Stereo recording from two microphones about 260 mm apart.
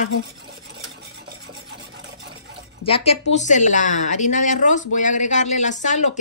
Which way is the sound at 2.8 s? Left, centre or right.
Left.